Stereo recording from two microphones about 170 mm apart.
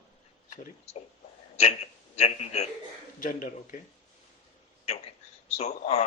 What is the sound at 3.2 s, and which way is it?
Speech, 50° left (ahead or behind).